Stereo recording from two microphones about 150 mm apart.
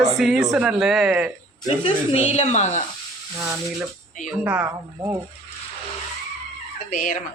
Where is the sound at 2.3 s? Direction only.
50° left (ahead or behind).